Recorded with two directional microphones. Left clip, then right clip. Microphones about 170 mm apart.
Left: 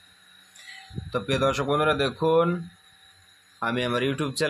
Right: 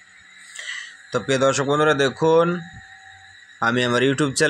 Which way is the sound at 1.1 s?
30° right (ahead or behind).